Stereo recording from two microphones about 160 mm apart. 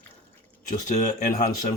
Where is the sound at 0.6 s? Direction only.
50° left (ahead or behind).